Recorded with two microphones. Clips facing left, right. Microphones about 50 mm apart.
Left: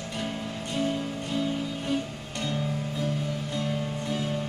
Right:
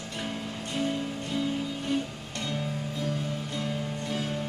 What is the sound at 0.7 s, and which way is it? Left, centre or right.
Music, centre.